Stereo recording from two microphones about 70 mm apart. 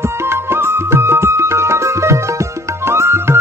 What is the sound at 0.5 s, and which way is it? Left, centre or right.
Music, right.